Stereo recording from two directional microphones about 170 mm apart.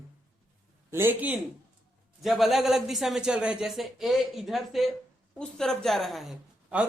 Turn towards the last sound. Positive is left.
turn(degrees=-5)  # may be behind; listen again after turning